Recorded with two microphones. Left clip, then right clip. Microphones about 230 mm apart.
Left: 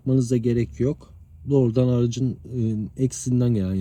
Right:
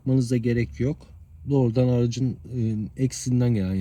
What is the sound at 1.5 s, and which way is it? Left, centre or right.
Speech, right.